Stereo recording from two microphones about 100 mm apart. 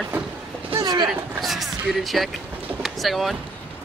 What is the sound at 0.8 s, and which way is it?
Speech, 45° right (ahead or behind).